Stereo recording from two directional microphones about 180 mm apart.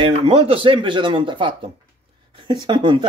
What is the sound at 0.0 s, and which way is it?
Speech, 30° right (ahead or behind).